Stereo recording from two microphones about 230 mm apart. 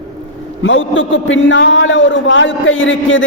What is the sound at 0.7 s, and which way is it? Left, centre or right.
A man's voice, left.